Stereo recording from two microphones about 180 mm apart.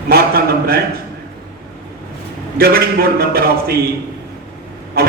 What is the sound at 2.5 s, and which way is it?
A man's voice, 55° right (ahead or behind).